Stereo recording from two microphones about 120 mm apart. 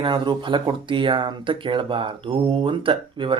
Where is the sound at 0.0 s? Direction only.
40° right (ahead or behind).